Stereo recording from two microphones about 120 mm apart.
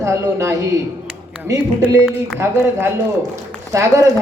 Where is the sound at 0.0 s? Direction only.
25° right (ahead or behind).